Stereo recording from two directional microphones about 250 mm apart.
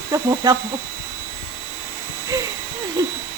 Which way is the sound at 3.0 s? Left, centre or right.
Centre.